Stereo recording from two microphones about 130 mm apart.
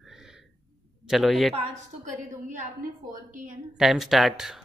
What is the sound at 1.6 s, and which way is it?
A woman's voice, 70° right (ahead or behind).